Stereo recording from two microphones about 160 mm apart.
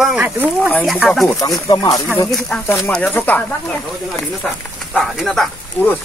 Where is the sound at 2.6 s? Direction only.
15° left (ahead or behind).